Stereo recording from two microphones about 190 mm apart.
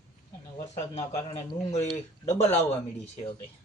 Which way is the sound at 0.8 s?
30° left (ahead or behind).